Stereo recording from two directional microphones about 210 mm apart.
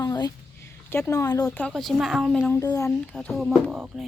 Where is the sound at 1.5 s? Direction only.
5° left (ahead or behind).